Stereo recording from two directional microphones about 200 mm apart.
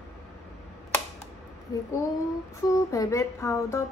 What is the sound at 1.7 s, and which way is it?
Speech, 20° left (ahead or behind).